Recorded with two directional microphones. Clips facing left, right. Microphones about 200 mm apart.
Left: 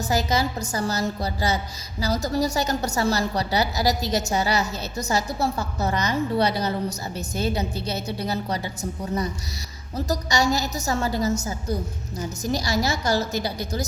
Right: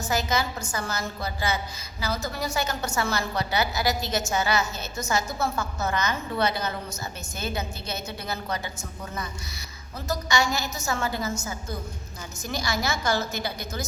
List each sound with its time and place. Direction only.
0.0 s a woman's voice: 35° left (ahead or behind)